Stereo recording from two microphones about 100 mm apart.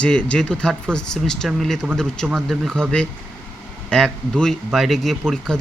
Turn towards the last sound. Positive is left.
turn(degrees=5)  # may be behind; listen again after turning